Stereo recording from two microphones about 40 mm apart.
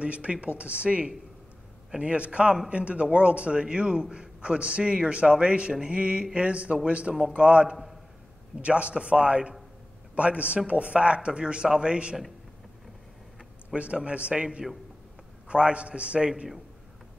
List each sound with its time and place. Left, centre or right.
0.0 s a man's voice: right
13.7 s a man's voice: right